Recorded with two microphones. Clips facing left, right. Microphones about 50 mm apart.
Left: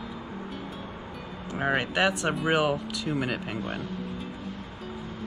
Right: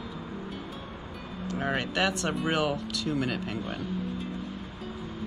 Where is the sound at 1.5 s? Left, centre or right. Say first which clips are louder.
Left 3 dB; centre.